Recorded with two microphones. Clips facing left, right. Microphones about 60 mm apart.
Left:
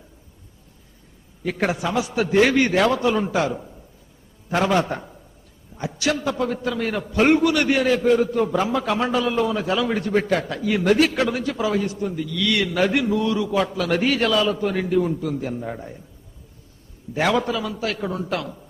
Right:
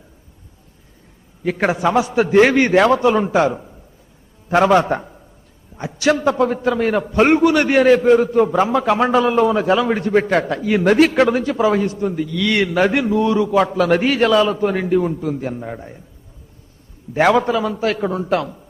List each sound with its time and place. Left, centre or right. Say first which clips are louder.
1.5 s a man's voice: right 5 dB; right
1.8 s a man's voice: right 7 dB; right
10.3 s a man's voice: right 5 dB; right
15.6 s a man's voice: right 1 dB; centre
17.2 s a man's voice: right 6 dB; right